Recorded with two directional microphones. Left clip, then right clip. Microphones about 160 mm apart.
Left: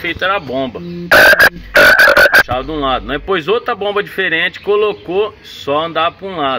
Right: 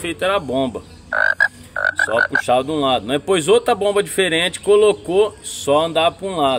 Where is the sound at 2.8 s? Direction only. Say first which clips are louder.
Left 2 dB; 25° right (ahead or behind).